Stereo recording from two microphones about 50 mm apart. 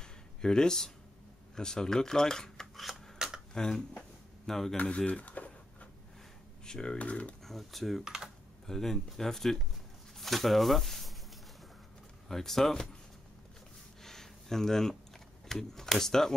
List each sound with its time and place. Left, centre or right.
0.0 s a sound: centre
1.6 s speech: centre
3.2 s a sound: centre
3.5 s speech: centre
4.8 s pigeon: left
6.6 s speech: centre
7.0 s speech: left
7.4 s speech: centre
8.0 s speech: centre
8.6 s speech: centre
12.3 s speech: centre
14.0 s a sound: centre
15.4 s speech: centre